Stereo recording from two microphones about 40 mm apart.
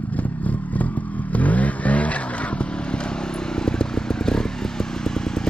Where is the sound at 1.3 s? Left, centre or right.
Left.